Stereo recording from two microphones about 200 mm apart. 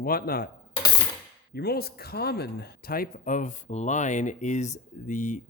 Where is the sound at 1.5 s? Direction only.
50° left (ahead or behind).